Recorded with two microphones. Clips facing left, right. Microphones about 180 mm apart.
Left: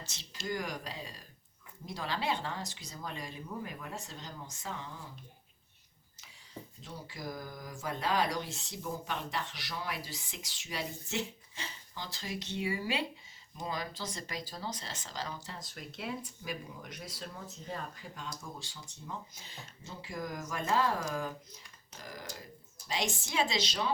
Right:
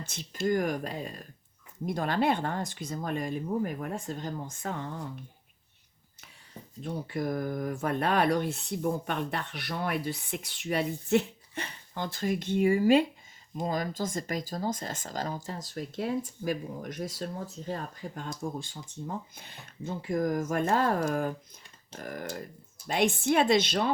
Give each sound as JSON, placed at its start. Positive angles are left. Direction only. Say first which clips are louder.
{"t": 0.0, "sound": "speech", "louder": "right 12 dB", "side_deg": -55}
{"t": 6.8, "sound": "speech", "louder": "right 12 dB", "side_deg": -60}